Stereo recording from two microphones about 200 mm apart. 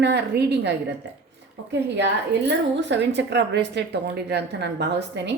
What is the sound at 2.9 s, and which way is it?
A woman's voice, 60° right (ahead or behind).